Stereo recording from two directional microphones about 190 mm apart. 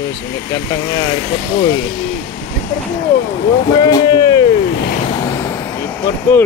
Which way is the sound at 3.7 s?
20° left (ahead or behind).